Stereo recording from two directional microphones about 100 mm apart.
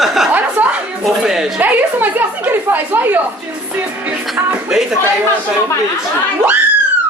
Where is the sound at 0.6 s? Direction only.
15° right (ahead or behind).